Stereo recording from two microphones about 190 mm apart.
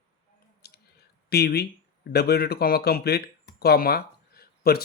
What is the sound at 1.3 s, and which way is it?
Speech, 55° left (ahead or behind).